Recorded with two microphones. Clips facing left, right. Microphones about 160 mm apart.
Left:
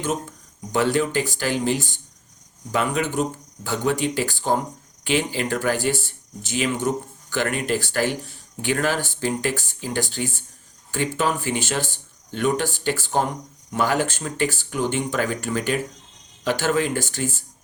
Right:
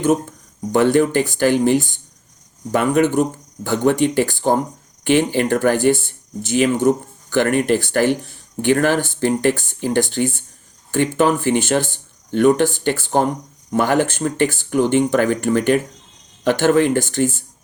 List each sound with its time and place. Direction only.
0.0 s speech: 55° right (ahead or behind)